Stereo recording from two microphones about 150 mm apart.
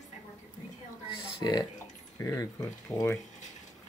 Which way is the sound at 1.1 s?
30° left (ahead or behind).